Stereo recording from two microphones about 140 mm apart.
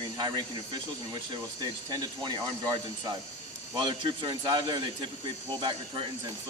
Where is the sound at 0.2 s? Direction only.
30° right (ahead or behind).